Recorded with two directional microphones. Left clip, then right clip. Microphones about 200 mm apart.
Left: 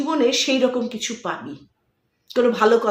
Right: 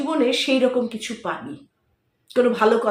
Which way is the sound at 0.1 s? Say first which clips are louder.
Left 1 dB; 20° left (ahead or behind).